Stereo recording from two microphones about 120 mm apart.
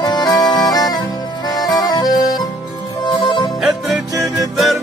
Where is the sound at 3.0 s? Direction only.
40° left (ahead or behind).